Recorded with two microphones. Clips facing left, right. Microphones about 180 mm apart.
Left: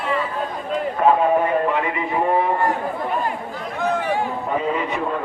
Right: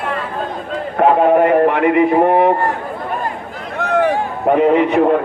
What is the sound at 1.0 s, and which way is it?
Speech, 70° right (ahead or behind).